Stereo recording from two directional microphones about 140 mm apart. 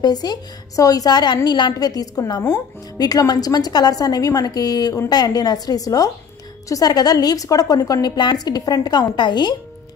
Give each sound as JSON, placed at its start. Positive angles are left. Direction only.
{"t": 0.0, "sound": "a woman's voice", "side_deg": 30}